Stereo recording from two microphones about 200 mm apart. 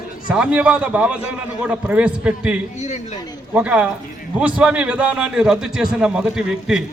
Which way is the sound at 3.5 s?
5° right (ahead or behind).